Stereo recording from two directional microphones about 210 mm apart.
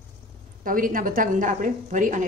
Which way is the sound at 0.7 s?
40° right (ahead or behind).